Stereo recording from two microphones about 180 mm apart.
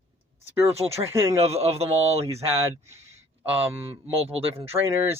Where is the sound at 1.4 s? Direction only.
35° right (ahead or behind).